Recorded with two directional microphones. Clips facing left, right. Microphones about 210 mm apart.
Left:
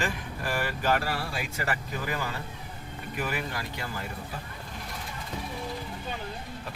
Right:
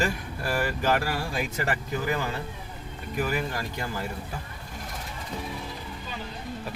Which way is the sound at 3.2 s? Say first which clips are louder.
Right 4 dB; 40° right (ahead or behind).